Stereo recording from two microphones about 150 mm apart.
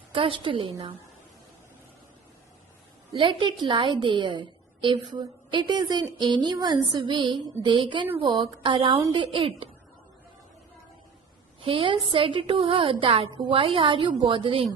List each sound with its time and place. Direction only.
0.1 s a woman's voice: 35° right (ahead or behind)
3.1 s a woman's voice: 35° right (ahead or behind)
11.6 s a woman's voice: 35° right (ahead or behind)